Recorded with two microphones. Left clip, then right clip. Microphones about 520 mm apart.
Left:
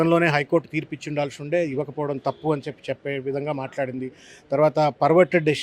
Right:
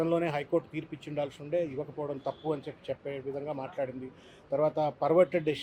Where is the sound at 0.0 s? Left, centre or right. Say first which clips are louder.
Left 10 dB; left.